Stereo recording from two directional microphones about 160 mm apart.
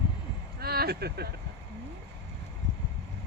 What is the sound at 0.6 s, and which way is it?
Speech, 75° right (ahead or behind).